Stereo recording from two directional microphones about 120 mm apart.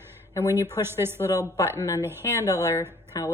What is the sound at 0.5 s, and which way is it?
Speech, 20° right (ahead or behind).